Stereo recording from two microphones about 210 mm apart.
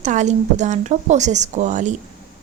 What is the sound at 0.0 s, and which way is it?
A woman's voice, 35° right (ahead or behind).